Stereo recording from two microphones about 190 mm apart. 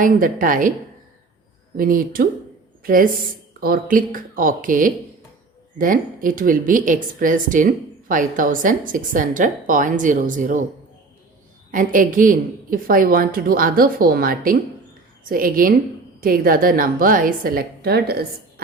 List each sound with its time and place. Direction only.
0.0 s a woman's voice: 45° right (ahead or behind)
1.7 s a woman's voice: 50° right (ahead or behind)
11.7 s a woman's voice: 45° right (ahead or behind)